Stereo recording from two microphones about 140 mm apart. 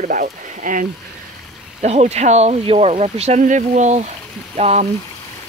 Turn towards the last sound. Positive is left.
turn(degrees=-50)  # may be behind; listen again after turning